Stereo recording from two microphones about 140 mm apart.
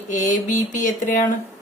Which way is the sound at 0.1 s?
65° left (ahead or behind).